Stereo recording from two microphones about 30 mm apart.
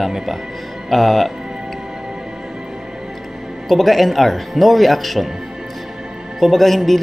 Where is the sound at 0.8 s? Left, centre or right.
Centre.